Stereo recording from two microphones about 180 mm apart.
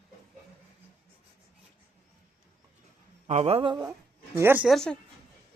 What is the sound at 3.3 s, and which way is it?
Speech, 35° right (ahead or behind).